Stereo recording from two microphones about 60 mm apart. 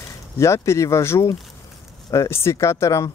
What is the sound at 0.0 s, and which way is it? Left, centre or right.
Speech, left.